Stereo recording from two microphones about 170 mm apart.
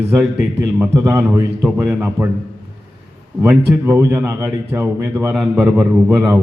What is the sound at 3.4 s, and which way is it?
A man's voice, 10° right (ahead or behind).